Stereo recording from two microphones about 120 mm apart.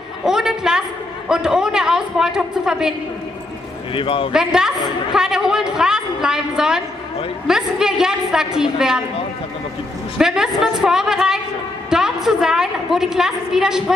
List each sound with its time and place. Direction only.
0.2 s a sound: 5° right (ahead or behind)
1.3 s a woman's voice: 5° right (ahead or behind)
3.9 s a man's voice: 50° left (ahead or behind)
4.3 s a woman's voice: 5° right (ahead or behind)
10.1 s a woman's voice: 5° right (ahead or behind)